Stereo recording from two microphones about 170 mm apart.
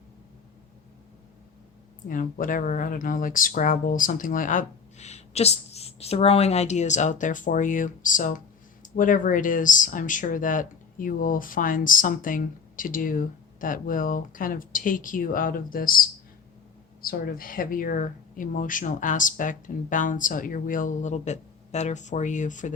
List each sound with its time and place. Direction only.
2.0 s speech: 50° left (ahead or behind)